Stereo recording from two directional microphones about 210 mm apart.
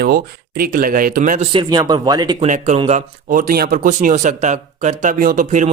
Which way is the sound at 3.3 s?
40° right (ahead or behind).